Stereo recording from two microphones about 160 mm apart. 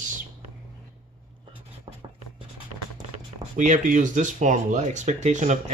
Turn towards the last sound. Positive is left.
turn(degrees=-50)  # may be behind; listen again after turning